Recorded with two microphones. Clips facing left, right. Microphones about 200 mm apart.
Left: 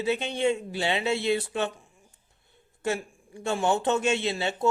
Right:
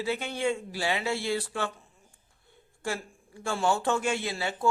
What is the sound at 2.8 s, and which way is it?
Speech, 20° left (ahead or behind).